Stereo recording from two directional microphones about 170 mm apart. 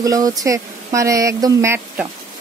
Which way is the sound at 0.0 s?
20° right (ahead or behind).